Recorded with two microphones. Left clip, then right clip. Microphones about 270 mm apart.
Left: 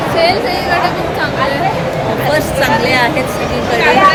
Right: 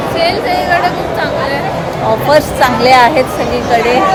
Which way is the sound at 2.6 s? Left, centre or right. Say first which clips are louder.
Right 4 dB; centre.